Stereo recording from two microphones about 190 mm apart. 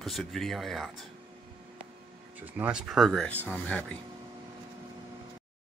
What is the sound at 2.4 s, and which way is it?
Speech, 10° right (ahead or behind).